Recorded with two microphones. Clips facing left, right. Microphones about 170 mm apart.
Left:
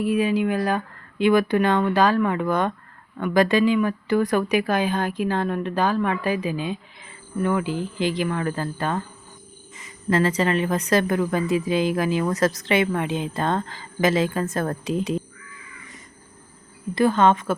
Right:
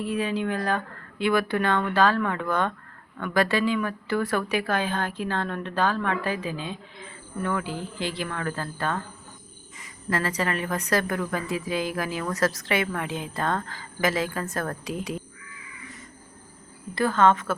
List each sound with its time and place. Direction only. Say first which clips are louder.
0.0 s speech: left 6 dB; 10° left (ahead or behind)
16.9 s speech: left 3 dB; 20° left (ahead or behind)